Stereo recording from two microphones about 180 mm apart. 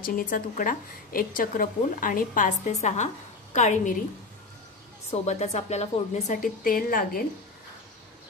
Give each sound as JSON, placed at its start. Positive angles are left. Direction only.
{"t": 0.0, "sound": "a woman's voice", "side_deg": 50}
{"t": 5.1, "sound": "speech", "side_deg": 40}